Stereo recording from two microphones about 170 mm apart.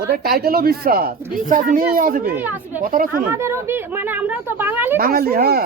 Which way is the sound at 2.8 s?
55° right (ahead or behind).